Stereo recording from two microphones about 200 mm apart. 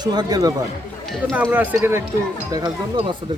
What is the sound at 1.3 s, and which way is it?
Speech, 10° right (ahead or behind).